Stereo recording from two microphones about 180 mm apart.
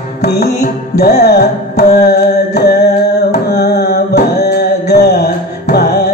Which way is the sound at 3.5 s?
60° left (ahead or behind).